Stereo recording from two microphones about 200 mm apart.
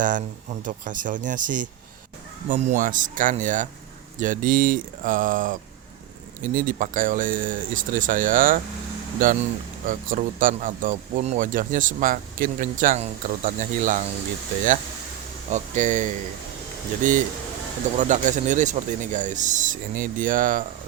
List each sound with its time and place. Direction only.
0.0 s speech: 40° right (ahead or behind)
15.4 s speech: 35° right (ahead or behind)